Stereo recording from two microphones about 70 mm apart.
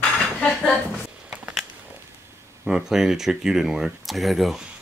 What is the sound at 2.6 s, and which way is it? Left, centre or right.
Speech, centre.